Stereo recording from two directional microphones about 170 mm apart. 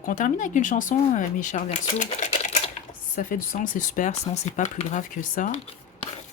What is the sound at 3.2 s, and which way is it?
A woman's voice, 55° left (ahead or behind).